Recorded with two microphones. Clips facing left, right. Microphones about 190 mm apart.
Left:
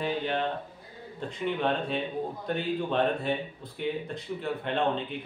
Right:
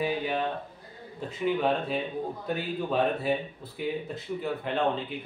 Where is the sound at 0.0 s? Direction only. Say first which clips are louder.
Right 1 dB; 5° right (ahead or behind).